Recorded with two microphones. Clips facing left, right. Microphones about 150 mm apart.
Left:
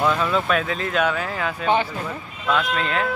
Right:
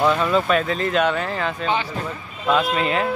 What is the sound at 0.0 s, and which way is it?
Speech, 5° right (ahead or behind).